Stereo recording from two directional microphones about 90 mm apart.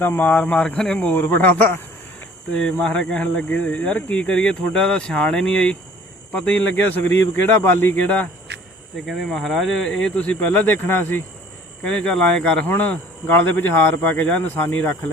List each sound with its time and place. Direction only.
0.0 s speech: 20° left (ahead or behind)
9.0 s speech: centre (ahead or behind); by 11.2 s 20° left (ahead or behind)
11.8 s speech: 10° left (ahead or behind)
12.6 s speech: 20° left (ahead or behind)